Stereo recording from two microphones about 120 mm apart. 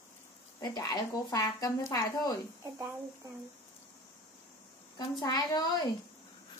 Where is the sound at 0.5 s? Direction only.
30° left (ahead or behind).